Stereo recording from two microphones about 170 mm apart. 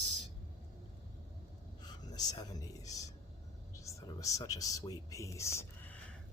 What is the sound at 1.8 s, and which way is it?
A man's voice, 25° left (ahead or behind).